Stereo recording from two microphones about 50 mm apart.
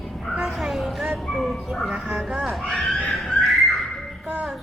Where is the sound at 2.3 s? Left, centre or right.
Centre.